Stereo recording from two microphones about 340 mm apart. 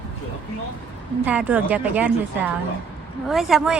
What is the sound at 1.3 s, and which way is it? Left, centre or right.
A woman's voice, centre.